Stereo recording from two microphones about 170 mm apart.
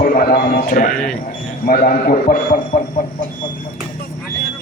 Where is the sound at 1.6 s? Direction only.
55° left (ahead or behind).